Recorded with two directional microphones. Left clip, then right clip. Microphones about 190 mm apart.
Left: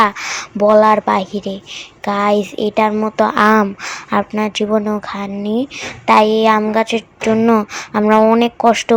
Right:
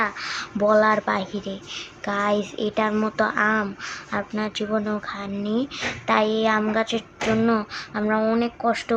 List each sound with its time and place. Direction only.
0.0 s speech: 35° left (ahead or behind)
0.5 s speech: 20° left (ahead or behind)
3.3 s speech: 40° left (ahead or behind)